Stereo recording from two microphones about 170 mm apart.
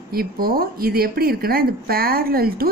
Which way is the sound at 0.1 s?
60° right (ahead or behind).